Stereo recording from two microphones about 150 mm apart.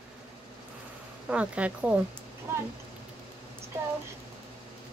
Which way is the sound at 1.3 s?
10° right (ahead or behind).